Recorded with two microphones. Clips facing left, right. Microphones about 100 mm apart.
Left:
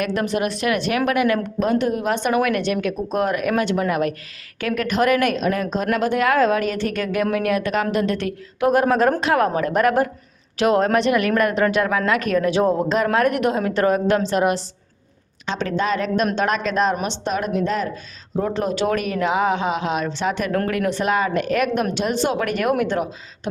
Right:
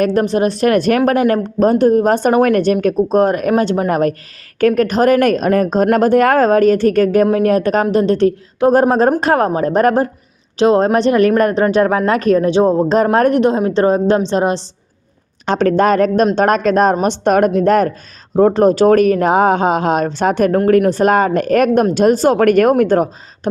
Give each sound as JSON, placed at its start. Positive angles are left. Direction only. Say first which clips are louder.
{"t": 0.0, "sound": "a woman's voice", "louder": "right 8 dB", "side_deg": -35}
{"t": 15.4, "sound": "speech", "louder": "right 10 dB", "side_deg": -50}